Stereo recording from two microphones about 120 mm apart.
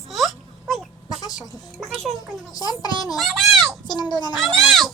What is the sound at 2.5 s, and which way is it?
Speech, 30° left (ahead or behind).